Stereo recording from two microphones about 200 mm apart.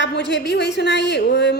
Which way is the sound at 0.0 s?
60° left (ahead or behind).